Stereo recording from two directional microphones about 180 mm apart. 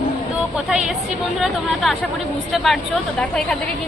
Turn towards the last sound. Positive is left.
turn(degrees=5)  # may be behind; listen again after turning